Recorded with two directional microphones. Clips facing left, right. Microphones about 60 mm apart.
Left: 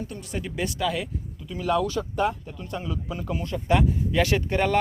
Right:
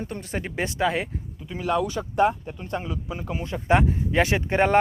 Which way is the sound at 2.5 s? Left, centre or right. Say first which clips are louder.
Right 2 dB; right.